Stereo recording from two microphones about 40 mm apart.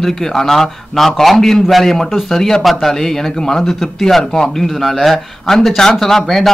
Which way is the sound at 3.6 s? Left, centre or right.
Centre.